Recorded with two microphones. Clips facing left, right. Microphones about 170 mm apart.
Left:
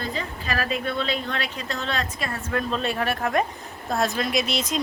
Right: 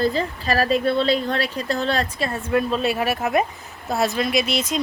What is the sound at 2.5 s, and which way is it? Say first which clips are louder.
A woman's voice: right 5 dB; 10° right (ahead or behind).